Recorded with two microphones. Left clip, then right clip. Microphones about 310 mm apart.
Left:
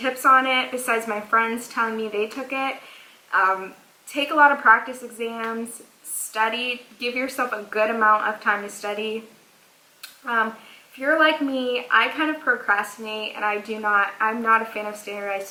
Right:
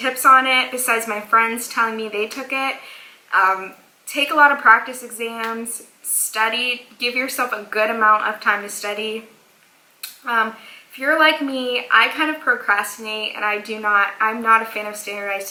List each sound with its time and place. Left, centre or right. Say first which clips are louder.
0.2 s a woman's voice: right 4 dB; centre
10.0 s a sound: right 3 dB; centre
10.9 s a woman's voice: right 3 dB; centre